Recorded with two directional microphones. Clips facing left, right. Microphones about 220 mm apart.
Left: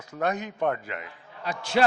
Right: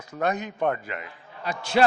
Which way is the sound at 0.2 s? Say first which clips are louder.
Right 1 dB; 15° right (ahead or behind).